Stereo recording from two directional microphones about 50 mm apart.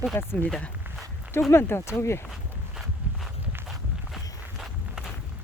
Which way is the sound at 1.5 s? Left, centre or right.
Left.